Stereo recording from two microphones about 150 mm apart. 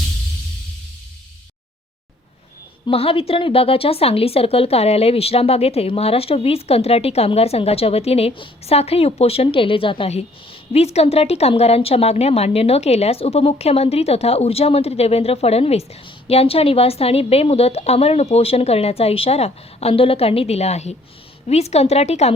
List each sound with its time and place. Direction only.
2.8 s a woman's voice: 40° left (ahead or behind)